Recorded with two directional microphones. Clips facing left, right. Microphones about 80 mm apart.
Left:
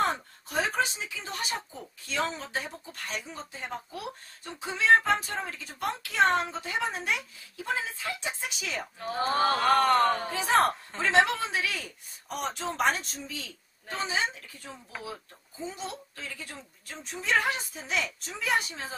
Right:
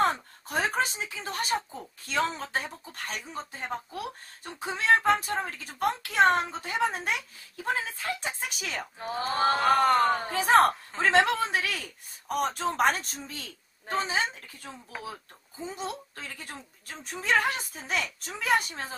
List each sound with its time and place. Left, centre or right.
0.5 s speech: right
9.1 s speech: left
9.4 s speech: right
9.8 s speech: centre
10.3 s speech: right